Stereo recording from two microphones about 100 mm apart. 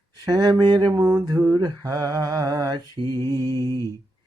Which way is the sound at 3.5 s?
40° right (ahead or behind).